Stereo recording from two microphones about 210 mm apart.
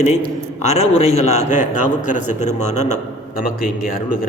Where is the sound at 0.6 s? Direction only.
30° left (ahead or behind).